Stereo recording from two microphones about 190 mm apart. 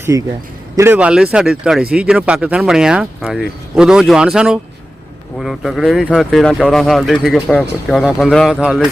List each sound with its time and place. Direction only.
0.1 s a man's voice: 15° right (ahead or behind)